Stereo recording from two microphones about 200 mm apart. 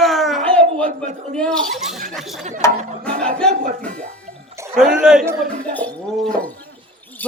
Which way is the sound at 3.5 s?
45° right (ahead or behind).